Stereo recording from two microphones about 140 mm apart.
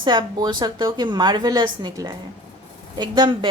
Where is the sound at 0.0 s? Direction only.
30° right (ahead or behind).